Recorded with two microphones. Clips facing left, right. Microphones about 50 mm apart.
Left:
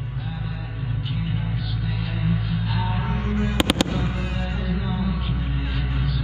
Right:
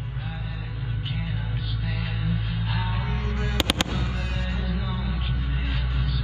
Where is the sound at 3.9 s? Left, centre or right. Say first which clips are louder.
Left 4 dB; left.